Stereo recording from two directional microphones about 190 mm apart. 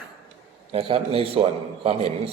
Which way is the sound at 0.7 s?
30° right (ahead or behind).